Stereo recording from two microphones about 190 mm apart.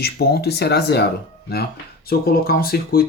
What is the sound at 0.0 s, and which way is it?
Speech, 55° left (ahead or behind).